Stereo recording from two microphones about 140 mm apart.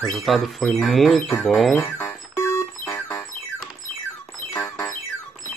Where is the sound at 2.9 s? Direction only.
15° left (ahead or behind).